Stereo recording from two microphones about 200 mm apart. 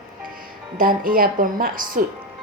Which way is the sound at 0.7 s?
45° right (ahead or behind).